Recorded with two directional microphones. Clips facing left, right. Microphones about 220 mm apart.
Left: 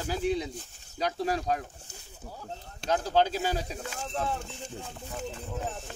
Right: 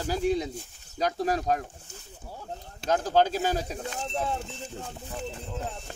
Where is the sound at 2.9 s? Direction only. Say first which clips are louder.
Right 2 dB; 45° right (ahead or behind).